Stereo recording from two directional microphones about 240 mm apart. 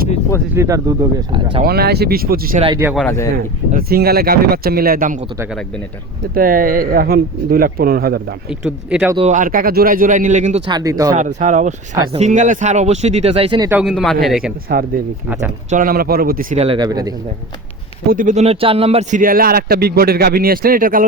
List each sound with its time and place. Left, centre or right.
0.5 s speech: centre
1.6 s speech: right
2.7 s speech: centre
3.0 s speech: centre
3.3 s speech: right
5.4 s a man's voice: centre
6.3 s speech: right
8.4 s a man's voice: centre
9.1 s speech: right
10.7 s speech: centre
11.3 s speech: right
13.7 s a man's voice: centre
14.7 s speech: right; by 17.2 s centre
18.1 s speech: right